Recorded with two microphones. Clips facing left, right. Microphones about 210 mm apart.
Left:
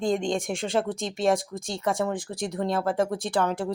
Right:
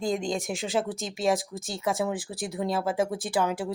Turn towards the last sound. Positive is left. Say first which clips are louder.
# left 1 dB
turn(degrees=-5)  # may be behind; listen again after turning